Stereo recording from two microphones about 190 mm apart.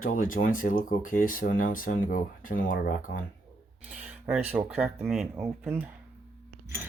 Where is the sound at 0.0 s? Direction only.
45° left (ahead or behind).